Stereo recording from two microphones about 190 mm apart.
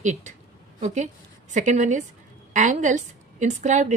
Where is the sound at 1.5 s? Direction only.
40° right (ahead or behind).